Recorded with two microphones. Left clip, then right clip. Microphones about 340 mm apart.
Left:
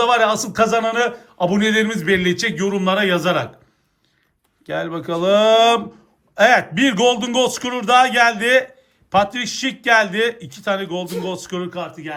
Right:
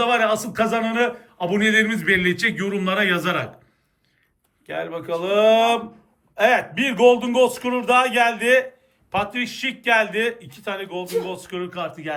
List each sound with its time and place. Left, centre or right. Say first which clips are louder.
0.0 s speech: left 3 dB; centre
4.6 s a man's voice: left 4 dB; centre